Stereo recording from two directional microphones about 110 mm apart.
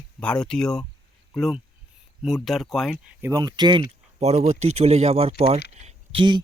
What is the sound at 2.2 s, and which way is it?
Speech, centre (ahead or behind).